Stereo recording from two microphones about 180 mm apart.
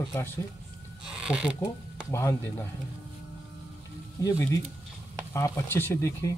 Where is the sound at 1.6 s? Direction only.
15° left (ahead or behind).